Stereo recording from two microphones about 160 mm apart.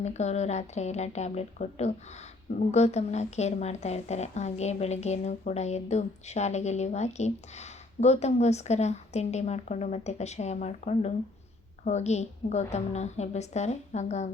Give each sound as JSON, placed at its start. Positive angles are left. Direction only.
{"t": 0.0, "sound": "a woman's voice", "side_deg": 45}